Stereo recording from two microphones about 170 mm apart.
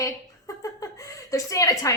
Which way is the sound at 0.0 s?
20° left (ahead or behind).